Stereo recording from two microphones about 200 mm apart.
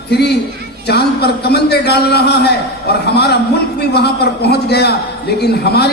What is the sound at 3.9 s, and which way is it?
A man's voice, 55° left (ahead or behind).